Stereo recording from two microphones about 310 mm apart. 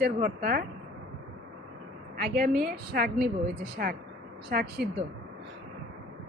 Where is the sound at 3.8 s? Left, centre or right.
Right.